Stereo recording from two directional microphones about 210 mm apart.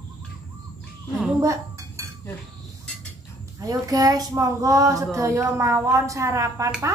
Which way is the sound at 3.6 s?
15° right (ahead or behind).